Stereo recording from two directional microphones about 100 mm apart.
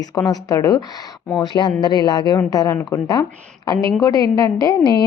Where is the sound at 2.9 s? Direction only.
30° left (ahead or behind).